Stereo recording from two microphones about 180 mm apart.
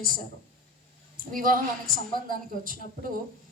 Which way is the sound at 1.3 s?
50° right (ahead or behind).